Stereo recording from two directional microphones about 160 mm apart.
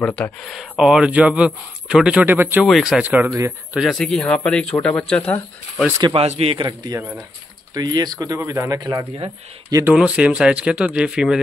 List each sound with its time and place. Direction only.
0.0 s speech: 5° left (ahead or behind); by 2.6 s 15° right (ahead or behind)
2.6 s speech: centre (ahead or behind)
3.7 s speech: centre (ahead or behind)
6.1 s a man's voice: 40° right (ahead or behind)
7.0 s speech: 10° right (ahead or behind)
7.7 s speech: 25° right (ahead or behind)
9.8 s speech: 10° right (ahead or behind)